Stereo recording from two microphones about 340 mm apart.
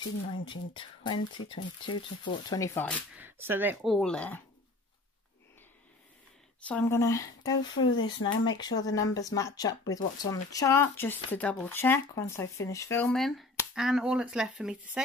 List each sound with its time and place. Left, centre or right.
0.7 s speech: centre
6.7 s speech: centre
7.8 s speech: left
8.5 s speech: centre